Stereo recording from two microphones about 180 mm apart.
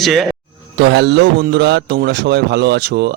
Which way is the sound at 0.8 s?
70° right (ahead or behind).